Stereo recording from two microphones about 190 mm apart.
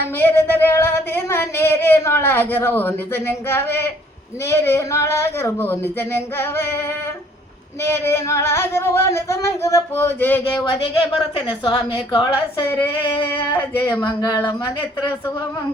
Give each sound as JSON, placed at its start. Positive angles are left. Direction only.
{"t": 0.0, "sound": "a sound", "side_deg": 10}
{"t": 10.6, "sound": "a woman's voice", "side_deg": 25}
{"t": 13.6, "sound": "a woman's voice", "side_deg": 20}